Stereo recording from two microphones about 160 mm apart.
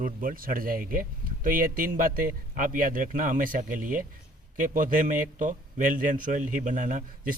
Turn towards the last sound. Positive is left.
turn(degrees=-55)  # may be behind; listen again after turning